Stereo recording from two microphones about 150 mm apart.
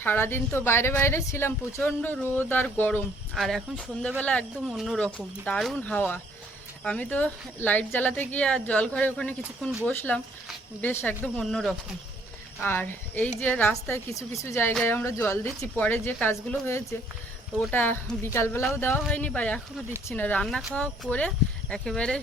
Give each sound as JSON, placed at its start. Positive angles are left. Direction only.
{"t": 0.0, "sound": "speech", "side_deg": 15}